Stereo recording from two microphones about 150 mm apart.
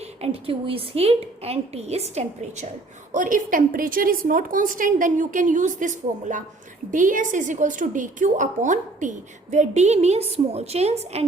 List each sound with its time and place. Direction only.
0.2 s a woman's voice: 40° right (ahead or behind)
3.1 s a woman's voice: 60° right (ahead or behind); by 11.3 s 45° right (ahead or behind)